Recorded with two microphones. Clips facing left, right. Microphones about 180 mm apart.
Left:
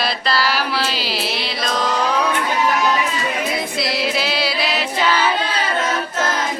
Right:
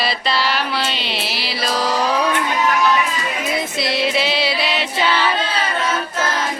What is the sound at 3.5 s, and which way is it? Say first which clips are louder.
Music: right 1 dB; centre (ahead or behind).